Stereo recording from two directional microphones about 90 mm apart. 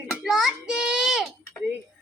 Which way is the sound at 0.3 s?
5° right (ahead or behind).